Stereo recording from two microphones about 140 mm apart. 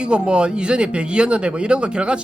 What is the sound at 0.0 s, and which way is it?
A man's voice, 5° right (ahead or behind).